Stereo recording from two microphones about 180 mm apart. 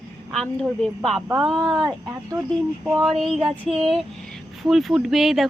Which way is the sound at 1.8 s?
20° right (ahead or behind).